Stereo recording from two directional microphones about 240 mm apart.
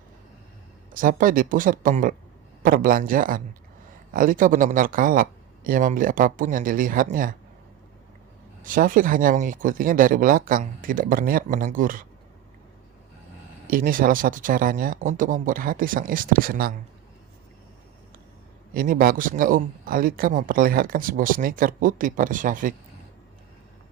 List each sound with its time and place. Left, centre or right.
0.9 s a man's voice: right
8.6 s a man's voice: right
13.7 s a man's voice: right
18.7 s a man's voice: right